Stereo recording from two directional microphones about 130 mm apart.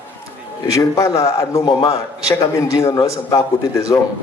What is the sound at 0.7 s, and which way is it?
Speech, 25° left (ahead or behind).